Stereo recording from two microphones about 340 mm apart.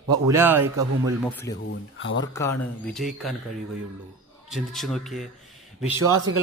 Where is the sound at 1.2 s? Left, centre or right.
Centre.